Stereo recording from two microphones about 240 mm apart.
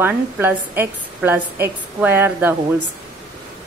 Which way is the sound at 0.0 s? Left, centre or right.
Centre.